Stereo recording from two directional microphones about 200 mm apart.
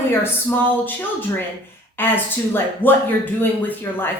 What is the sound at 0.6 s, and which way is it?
Speech, 10° left (ahead or behind).